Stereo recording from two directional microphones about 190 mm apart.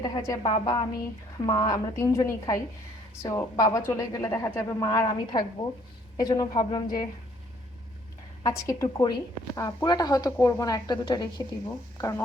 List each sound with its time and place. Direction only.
0.0 s speech: 20° left (ahead or behind)
8.4 s speech: 15° left (ahead or behind)